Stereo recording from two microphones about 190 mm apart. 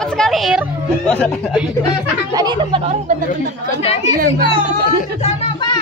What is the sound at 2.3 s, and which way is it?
Speech, 20° right (ahead or behind).